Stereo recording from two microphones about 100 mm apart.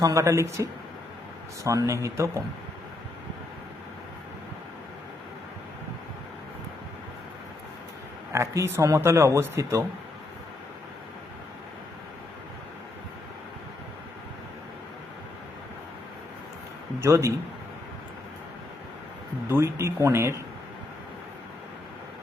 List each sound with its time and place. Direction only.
0.0 s speech: 30° right (ahead or behind)
8.3 s speech: 30° right (ahead or behind)
17.0 s speech: 30° right (ahead or behind)
19.5 s speech: 20° right (ahead or behind)